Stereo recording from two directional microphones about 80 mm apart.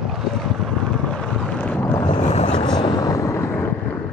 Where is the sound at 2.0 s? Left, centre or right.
Left.